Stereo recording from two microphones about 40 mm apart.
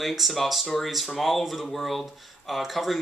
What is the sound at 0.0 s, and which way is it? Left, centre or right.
Speech, centre.